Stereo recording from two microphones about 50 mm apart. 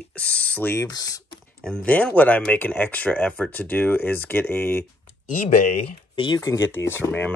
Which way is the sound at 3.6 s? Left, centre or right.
Left.